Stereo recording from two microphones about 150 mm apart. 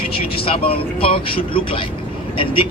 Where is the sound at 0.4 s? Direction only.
40° left (ahead or behind).